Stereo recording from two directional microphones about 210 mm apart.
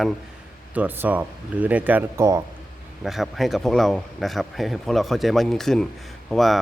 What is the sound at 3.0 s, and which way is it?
A man's voice, centre (ahead or behind).